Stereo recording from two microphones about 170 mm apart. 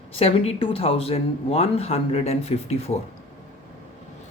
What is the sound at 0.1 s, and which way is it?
Speech, 35° left (ahead or behind).